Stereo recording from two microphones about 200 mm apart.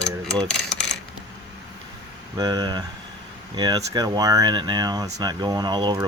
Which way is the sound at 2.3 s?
20° right (ahead or behind).